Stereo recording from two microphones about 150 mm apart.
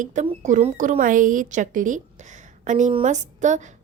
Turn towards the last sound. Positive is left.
turn(degrees=-50)  # may be behind; listen again after turning